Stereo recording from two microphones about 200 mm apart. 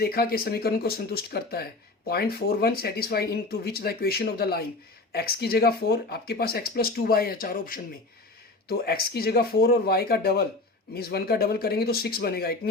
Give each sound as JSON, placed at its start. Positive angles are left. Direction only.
{"t": 0.0, "sound": "speech", "side_deg": 50}